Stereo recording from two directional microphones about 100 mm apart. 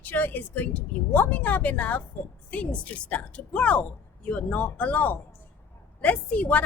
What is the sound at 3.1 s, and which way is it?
A woman's voice, 15° left (ahead or behind).